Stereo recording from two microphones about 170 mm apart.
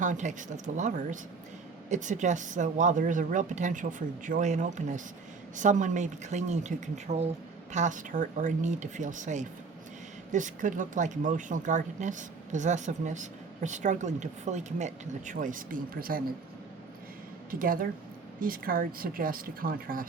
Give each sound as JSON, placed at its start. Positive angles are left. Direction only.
{"t": 0.0, "sound": "speech", "side_deg": -45}
{"t": 17.5, "sound": "speech", "side_deg": -55}